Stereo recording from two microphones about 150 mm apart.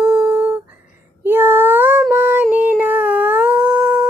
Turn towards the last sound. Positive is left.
turn(degrees=-5)  # may be behind; listen again after turning